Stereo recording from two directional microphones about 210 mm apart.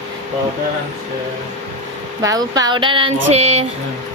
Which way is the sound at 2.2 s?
15° right (ahead or behind).